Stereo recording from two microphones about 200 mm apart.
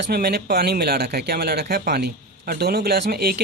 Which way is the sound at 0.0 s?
50° right (ahead or behind).